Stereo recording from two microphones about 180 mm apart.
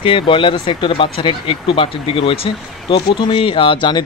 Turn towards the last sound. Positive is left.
turn(degrees=25)  # may be behind; listen again after turning